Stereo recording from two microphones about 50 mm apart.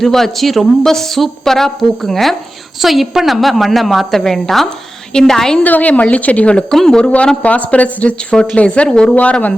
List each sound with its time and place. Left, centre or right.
0.0 s a woman's voice: centre
5.6 s speech: left
6.7 s a woman's voice: centre
7.4 s speech: left